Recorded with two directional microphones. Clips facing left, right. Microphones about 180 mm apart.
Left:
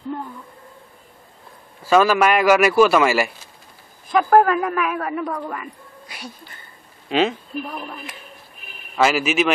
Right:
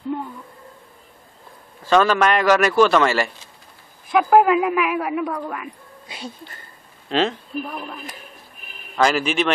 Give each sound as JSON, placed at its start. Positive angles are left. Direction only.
{"t": 1.8, "sound": "a man's voice", "side_deg": 10}
{"t": 4.1, "sound": "a man's voice", "side_deg": -5}
{"t": 6.0, "sound": "music", "side_deg": -25}
{"t": 7.1, "sound": "speech", "side_deg": 5}